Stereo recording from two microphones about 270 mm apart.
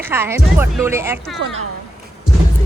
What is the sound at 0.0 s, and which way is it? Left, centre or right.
Speech, centre.